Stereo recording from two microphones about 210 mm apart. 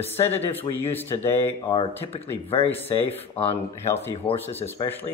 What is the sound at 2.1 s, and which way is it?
Speech, 25° left (ahead or behind).